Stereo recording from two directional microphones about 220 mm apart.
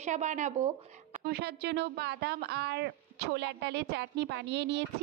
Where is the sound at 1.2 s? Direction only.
45° right (ahead or behind).